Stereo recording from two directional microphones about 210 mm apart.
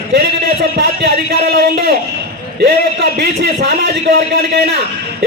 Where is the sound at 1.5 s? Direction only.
45° right (ahead or behind).